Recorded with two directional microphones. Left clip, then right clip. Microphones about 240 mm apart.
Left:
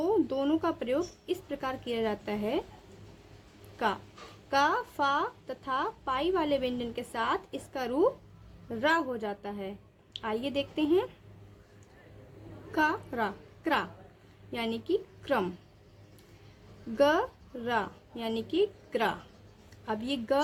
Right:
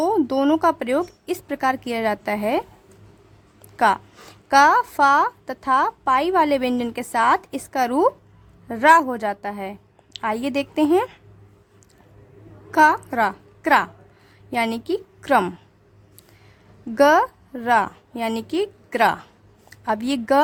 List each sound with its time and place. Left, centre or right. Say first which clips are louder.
0.0 s a woman's voice: right 9 dB; right
4.4 s a woman's voice: right 13 dB; right
12.7 s a woman's voice: right 13 dB; right
17.0 s a woman's voice: right 11 dB; right